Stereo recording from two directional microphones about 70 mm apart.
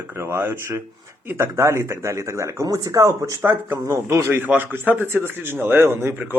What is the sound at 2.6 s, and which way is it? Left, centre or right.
Speech, right.